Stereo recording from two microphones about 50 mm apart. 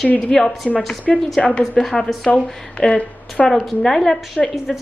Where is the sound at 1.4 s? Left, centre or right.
Left.